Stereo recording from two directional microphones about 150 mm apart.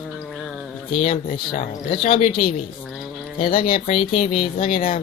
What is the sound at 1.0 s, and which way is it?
Speech, 45° left (ahead or behind).